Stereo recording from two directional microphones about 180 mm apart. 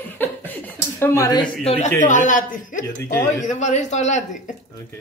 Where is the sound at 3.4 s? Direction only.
40° left (ahead or behind).